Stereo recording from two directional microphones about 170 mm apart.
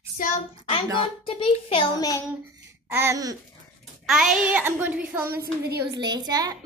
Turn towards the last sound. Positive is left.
turn(degrees=-25)  # may be behind; listen again after turning